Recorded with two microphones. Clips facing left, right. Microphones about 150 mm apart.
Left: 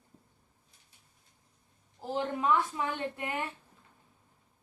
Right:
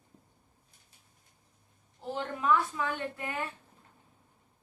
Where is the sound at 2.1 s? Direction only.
25° left (ahead or behind).